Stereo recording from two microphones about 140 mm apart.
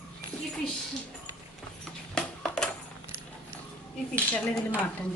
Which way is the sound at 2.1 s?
5° left (ahead or behind).